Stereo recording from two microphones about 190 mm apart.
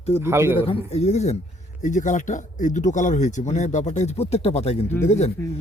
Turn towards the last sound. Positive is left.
turn(degrees=10)  # may be behind; listen again after turning